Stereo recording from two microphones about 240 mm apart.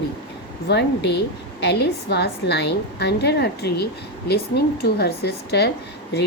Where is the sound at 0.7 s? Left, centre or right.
Left.